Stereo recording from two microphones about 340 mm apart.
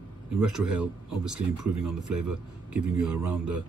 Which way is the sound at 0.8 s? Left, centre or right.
Centre.